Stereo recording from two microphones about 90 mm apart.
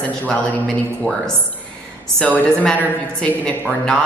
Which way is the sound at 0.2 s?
15° left (ahead or behind).